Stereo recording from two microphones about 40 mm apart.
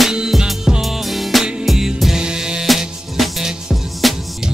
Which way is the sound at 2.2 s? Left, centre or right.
Centre.